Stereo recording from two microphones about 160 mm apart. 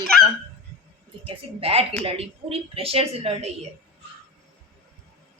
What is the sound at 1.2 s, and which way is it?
A woman's voice, 35° right (ahead or behind).